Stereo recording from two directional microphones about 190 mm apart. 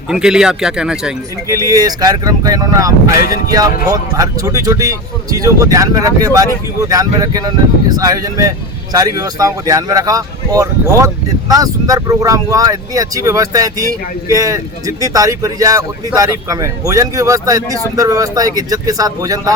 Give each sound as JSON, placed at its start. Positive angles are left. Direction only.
{"t": 0.1, "sound": "speech", "side_deg": -5}
{"t": 1.5, "sound": "speech", "side_deg": -15}
{"t": 3.1, "sound": "speech", "side_deg": 50}
{"t": 4.2, "sound": "speech", "side_deg": -20}